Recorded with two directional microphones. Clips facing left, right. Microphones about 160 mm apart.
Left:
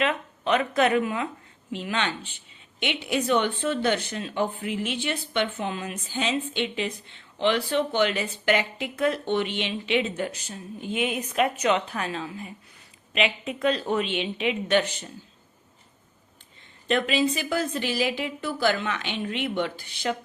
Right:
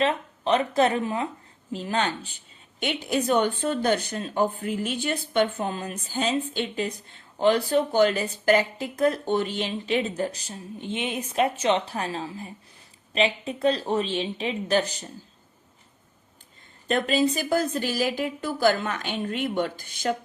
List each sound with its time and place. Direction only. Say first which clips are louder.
0.0 s speech: right 2 dB; 35° right (ahead or behind)
16.8 s a woman's voice: right 1 dB; 40° right (ahead or behind)